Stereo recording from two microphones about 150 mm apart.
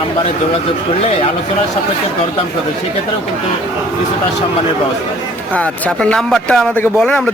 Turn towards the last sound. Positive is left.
turn(degrees=5)  # may be behind; listen again after turning